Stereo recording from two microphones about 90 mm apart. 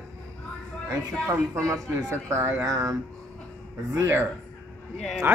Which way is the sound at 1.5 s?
30° right (ahead or behind).